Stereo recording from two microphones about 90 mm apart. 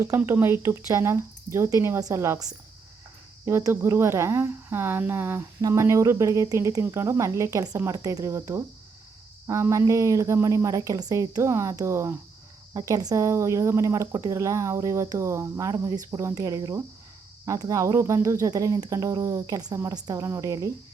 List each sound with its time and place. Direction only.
0.3 s speech: 25° right (ahead or behind)